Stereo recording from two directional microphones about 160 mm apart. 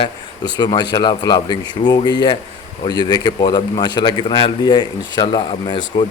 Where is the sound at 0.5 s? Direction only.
25° left (ahead or behind).